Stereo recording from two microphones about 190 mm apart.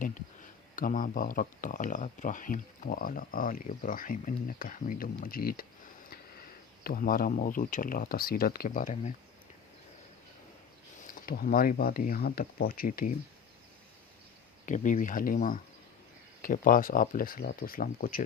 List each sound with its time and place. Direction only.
0.8 s speech: 45° left (ahead or behind)
6.8 s speech: 50° left (ahead or behind)
11.0 s speech: 50° left (ahead or behind)
14.7 s speech: 40° left (ahead or behind)